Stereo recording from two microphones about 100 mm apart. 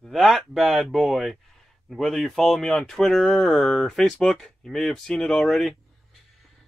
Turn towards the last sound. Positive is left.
turn(degrees=5)  # may be behind; listen again after turning